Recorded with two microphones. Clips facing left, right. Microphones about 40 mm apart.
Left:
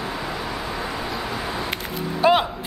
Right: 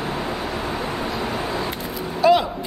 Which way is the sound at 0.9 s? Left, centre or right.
Right.